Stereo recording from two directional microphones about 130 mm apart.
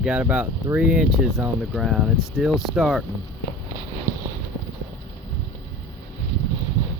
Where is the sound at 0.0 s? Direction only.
10° right (ahead or behind).